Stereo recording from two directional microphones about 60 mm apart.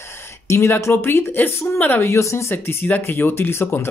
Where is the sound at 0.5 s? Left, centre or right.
Left.